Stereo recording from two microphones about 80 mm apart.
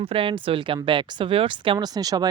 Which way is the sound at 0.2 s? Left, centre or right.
Right.